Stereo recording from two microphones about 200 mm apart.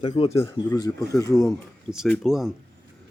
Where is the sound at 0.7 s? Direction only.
15° left (ahead or behind).